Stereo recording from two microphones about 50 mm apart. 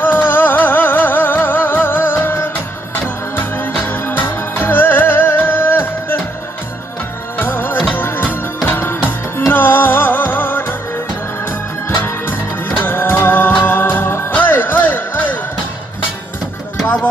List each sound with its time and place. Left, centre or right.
0.0 s music: left
3.3 s music: left
7.3 s music: left
12.0 s music: left